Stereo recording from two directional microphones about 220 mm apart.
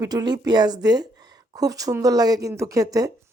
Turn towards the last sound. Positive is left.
turn(degrees=-15)  # may be behind; listen again after turning